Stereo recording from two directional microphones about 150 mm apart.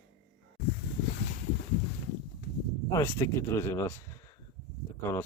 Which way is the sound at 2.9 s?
20° left (ahead or behind).